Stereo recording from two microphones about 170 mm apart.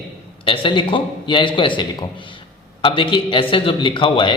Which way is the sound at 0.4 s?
30° left (ahead or behind).